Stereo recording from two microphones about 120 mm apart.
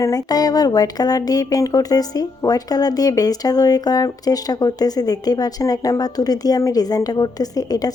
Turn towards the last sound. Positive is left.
turn(degrees=30)  # may be behind; listen again after turning